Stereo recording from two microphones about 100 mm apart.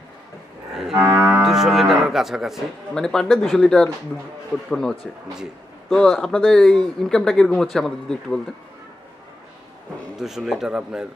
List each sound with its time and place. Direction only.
0.9 s cattle: 25° right (ahead or behind)
1.4 s livestock: 5° right (ahead or behind)
10.2 s livestock: 5° right (ahead or behind)